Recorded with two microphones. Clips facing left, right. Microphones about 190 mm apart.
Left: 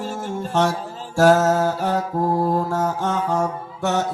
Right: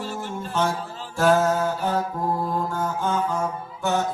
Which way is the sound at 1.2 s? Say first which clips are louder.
Left 4 dB; 75° left (ahead or behind).